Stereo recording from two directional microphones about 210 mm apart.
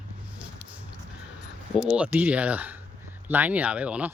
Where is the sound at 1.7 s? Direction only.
5° right (ahead or behind).